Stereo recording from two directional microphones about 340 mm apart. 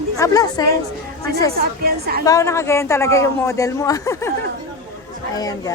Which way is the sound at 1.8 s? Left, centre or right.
Right.